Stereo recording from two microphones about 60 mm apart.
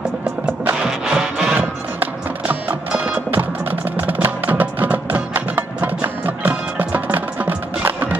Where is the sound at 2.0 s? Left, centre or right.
Right.